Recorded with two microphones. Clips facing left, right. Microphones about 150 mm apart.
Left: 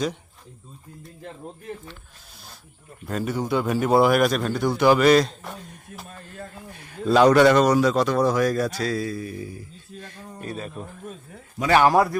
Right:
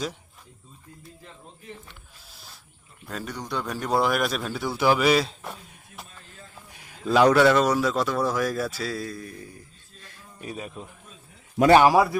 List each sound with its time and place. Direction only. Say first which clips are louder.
3.1 s a man's voice: left 8 dB; 5° left (ahead or behind)
6.1 s a sound: left 10 dB; 60° left (ahead or behind)
6.7 s a sound: left 2 dB; 10° right (ahead or behind)
7.3 s a man's voice: left 3 dB; centre (ahead or behind)
10.4 s speech: left 2 dB; 10° right (ahead or behind)
11.9 s a man's voice: even; centre (ahead or behind)